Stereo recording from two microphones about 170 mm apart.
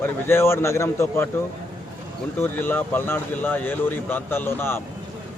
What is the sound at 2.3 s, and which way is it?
Speech, 15° left (ahead or behind).